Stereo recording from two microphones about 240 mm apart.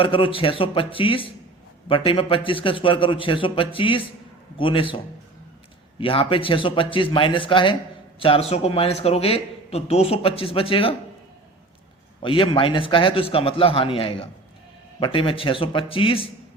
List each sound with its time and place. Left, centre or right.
0.0 s a man's voice: left
6.0 s a man's voice: left
12.2 s a man's voice: left